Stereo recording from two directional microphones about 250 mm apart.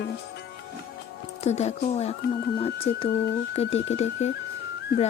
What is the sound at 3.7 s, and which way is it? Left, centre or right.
Speech, left.